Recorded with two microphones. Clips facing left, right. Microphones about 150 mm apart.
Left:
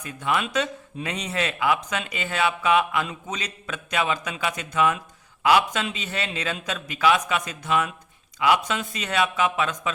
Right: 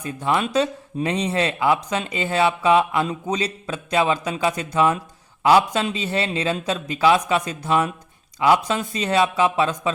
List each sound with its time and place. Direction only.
0.0 s speech: 30° right (ahead or behind)